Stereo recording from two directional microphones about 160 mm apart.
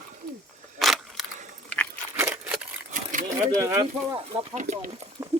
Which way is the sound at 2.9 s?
55° right (ahead or behind).